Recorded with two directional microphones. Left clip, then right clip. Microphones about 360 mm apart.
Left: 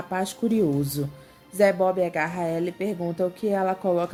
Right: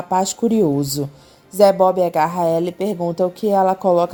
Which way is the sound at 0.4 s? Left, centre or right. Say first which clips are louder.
Right 7 dB; centre.